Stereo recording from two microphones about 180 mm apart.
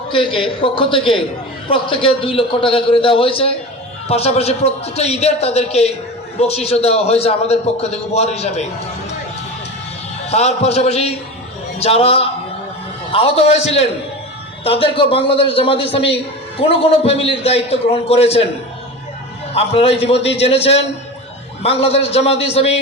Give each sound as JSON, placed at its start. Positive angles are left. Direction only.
{"t": 0.1, "sound": "a man's voice", "side_deg": 30}
{"t": 10.2, "sound": "a man's voice", "side_deg": 35}
{"t": 19.5, "sound": "a man's voice", "side_deg": 35}